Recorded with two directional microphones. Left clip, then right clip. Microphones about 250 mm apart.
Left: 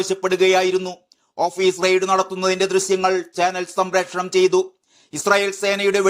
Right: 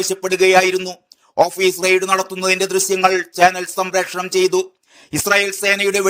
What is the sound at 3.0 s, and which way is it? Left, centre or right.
Speech, right.